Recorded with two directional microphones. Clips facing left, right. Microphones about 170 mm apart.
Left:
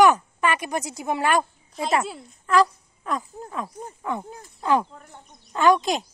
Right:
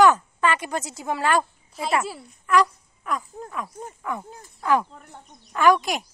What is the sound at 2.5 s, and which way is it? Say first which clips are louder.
Wail: left 1 dB; 30° left (ahead or behind).